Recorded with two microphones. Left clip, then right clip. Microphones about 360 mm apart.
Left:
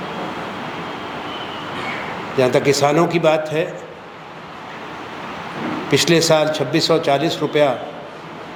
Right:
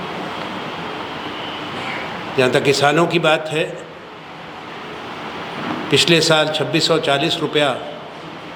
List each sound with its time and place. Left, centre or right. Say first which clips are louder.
2.4 s a man's voice: even; centre
5.9 s a man's voice: right 1 dB; centre